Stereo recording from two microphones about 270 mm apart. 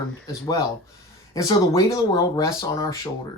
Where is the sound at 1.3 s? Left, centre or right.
Centre.